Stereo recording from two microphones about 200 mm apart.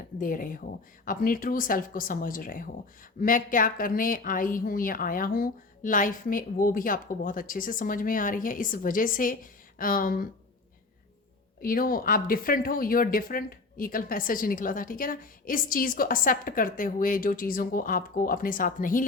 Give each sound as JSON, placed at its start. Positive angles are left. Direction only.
{"t": 0.2, "sound": "speech", "side_deg": 45}
{"t": 11.6, "sound": "speech", "side_deg": 45}